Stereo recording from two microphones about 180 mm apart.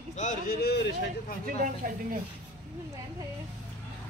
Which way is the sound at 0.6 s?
65° left (ahead or behind).